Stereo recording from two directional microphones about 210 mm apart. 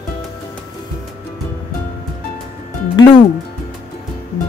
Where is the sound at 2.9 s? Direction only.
20° left (ahead or behind).